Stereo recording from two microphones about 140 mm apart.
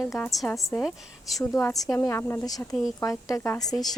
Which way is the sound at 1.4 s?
25° left (ahead or behind).